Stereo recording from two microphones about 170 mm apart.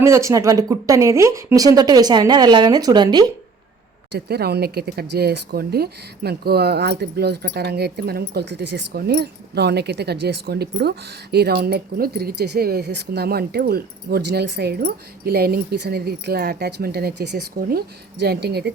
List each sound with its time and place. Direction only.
0.0 s speech: 15° right (ahead or behind)
4.1 s speech: 70° right (ahead or behind)